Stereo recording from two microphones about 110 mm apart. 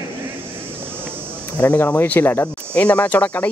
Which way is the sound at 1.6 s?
15° left (ahead or behind).